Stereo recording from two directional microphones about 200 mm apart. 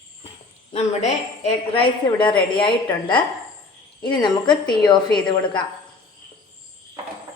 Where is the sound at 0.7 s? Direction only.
35° left (ahead or behind).